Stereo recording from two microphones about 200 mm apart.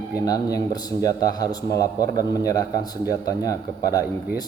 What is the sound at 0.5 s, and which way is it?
A man's voice, 20° left (ahead or behind).